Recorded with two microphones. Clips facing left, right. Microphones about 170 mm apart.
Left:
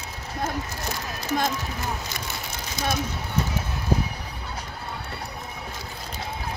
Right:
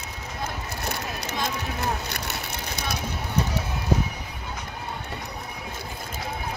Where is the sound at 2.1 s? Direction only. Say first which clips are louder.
Right 1 dB; 65° right (ahead or behind).